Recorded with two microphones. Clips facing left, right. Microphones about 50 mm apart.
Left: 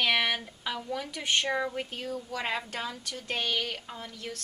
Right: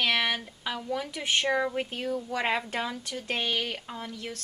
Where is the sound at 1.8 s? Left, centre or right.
Right; by 4.1 s centre.